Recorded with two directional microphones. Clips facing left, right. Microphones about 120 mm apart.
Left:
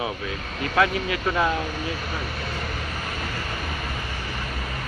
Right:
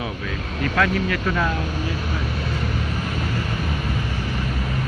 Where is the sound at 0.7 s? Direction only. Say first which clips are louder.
Even; 20° left (ahead or behind).